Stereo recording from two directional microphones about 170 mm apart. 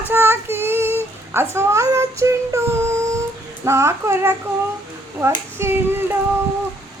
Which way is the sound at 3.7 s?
15° right (ahead or behind).